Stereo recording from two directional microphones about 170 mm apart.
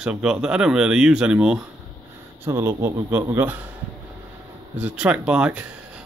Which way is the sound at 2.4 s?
20° right (ahead or behind).